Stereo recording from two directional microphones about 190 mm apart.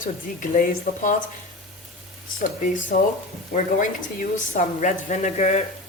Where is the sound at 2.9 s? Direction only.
45° left (ahead or behind).